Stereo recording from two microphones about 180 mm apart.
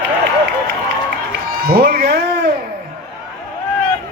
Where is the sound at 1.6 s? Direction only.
55° right (ahead or behind).